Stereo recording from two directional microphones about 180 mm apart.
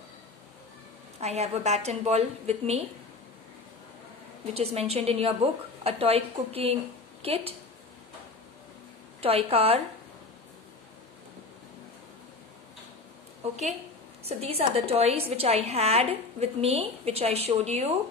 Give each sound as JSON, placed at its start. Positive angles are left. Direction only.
{"t": 1.2, "sound": "a woman's voice", "side_deg": -35}
{"t": 4.6, "sound": "a woman's voice", "side_deg": -35}
{"t": 9.2, "sound": "a woman's voice", "side_deg": -35}
{"t": 14.2, "sound": "a woman's voice", "side_deg": -35}